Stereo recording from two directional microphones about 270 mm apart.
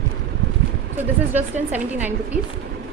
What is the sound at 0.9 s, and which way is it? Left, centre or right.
A woman's voice, centre.